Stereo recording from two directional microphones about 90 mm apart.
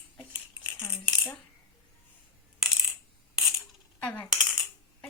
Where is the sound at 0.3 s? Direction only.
15° right (ahead or behind).